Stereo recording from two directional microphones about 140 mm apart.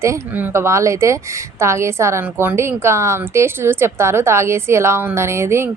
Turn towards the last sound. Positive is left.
turn(degrees=-20)  # may be behind; listen again after turning